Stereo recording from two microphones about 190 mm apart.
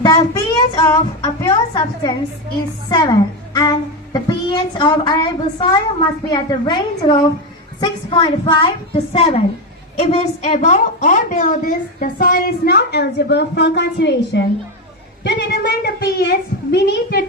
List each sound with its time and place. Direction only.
0.3 s a woman's voice: 20° left (ahead or behind); by 14.4 s 60° left (ahead or behind)
15.2 s child singing: 60° left (ahead or behind)
16.7 s a woman's voice: 60° left (ahead or behind)